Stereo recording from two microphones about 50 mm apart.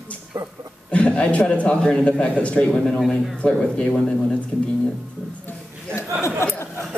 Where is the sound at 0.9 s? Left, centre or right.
Left.